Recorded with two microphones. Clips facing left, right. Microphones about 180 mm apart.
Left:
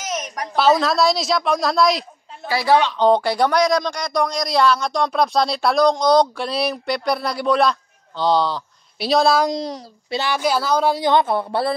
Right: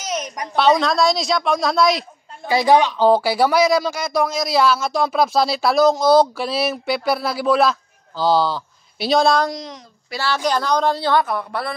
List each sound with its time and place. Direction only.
0.6 s speech: centre (ahead or behind)
2.4 s speech: 20° right (ahead or behind); by 9.5 s centre (ahead or behind)
9.6 s a child's voice: 35° left (ahead or behind)
10.1 s a woman's voice: 15° left (ahead or behind)